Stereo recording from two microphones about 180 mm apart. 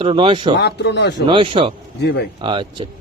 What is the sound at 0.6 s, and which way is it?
Speech, 70° left (ahead or behind).